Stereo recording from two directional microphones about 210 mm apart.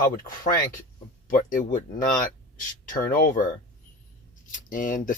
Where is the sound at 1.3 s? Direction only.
40° left (ahead or behind).